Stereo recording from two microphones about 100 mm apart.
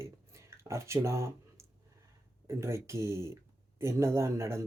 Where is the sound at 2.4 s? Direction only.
30° right (ahead or behind).